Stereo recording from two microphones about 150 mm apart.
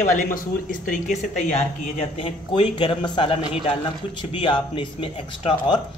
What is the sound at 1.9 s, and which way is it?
Speech, 40° left (ahead or behind).